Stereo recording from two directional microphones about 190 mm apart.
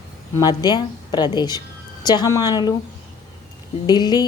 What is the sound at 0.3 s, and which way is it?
Speech, 20° left (ahead or behind).